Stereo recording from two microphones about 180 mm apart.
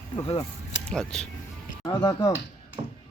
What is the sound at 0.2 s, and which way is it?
Speech, 35° left (ahead or behind).